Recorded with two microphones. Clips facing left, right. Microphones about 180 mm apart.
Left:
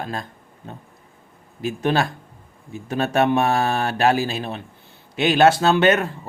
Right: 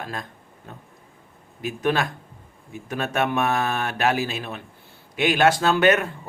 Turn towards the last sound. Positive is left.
turn(degrees=25)  # may be behind; listen again after turning